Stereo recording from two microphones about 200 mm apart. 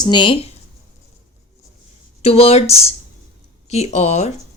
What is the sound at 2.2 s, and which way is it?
A woman's voice, 30° left (ahead or behind).